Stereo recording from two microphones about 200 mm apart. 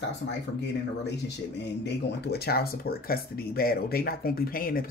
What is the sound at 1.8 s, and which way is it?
Speech, 55° left (ahead or behind).